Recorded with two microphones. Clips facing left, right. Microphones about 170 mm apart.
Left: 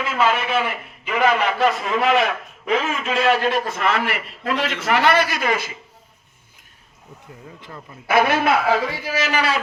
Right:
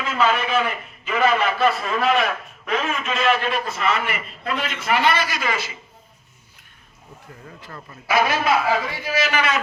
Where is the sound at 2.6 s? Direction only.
30° left (ahead or behind); by 4.8 s 85° left.